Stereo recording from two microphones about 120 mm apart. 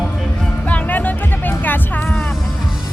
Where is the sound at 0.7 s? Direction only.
15° left (ahead or behind).